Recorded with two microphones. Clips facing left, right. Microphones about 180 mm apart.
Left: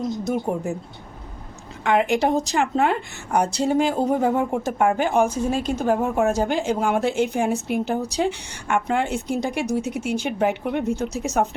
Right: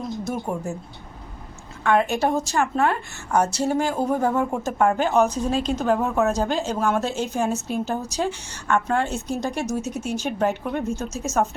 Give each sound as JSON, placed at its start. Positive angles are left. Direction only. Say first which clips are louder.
{"t": 0.3, "sound": "a woman's voice", "louder": "left 3 dB", "side_deg": 15}
{"t": 1.8, "sound": "a woman's voice", "louder": "left 1 dB", "side_deg": 15}